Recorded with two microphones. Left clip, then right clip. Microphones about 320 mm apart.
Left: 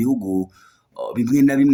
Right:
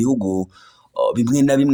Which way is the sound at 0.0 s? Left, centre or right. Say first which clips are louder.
Right 2 dB; centre.